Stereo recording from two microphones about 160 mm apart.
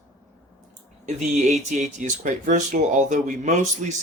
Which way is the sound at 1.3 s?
45° right (ahead or behind).